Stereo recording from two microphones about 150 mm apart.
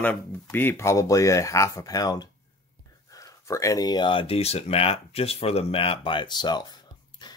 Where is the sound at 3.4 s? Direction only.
20° left (ahead or behind).